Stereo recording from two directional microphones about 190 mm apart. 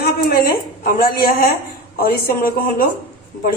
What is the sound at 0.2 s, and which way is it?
A woman's voice, 50° left (ahead or behind).